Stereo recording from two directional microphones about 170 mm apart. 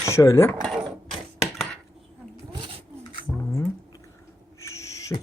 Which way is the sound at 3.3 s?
20° left (ahead or behind).